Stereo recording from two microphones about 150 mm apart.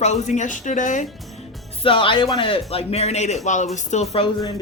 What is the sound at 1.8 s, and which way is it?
A man's voice, 35° left (ahead or behind).